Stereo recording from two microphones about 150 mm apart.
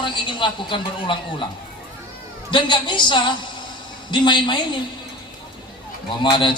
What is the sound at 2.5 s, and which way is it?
A man's voice, 30° left (ahead or behind).